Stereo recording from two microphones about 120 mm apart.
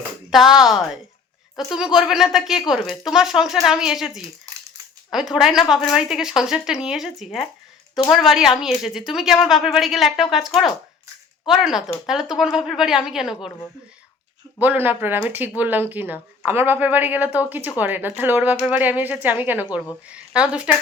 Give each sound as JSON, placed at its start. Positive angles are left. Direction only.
{"t": 0.3, "sound": "a woman's voice", "side_deg": -5}
{"t": 14.6, "sound": "a woman's voice", "side_deg": -15}